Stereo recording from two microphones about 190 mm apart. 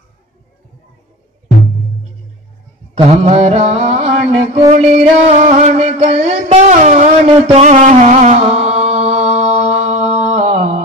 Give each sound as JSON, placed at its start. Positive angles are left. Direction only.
{"t": 3.1, "sound": "music", "side_deg": -35}
{"t": 7.4, "sound": "mantra", "side_deg": -35}